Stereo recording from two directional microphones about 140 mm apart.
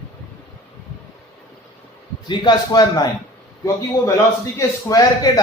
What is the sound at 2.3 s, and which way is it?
Speech, 30° left (ahead or behind).